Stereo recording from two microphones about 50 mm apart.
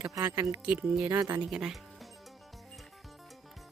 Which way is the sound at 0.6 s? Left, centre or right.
Right.